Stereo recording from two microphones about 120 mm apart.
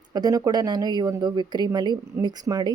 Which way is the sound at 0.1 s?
30° right (ahead or behind).